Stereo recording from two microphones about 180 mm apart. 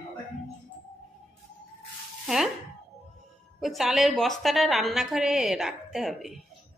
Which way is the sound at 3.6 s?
Centre (ahead or behind).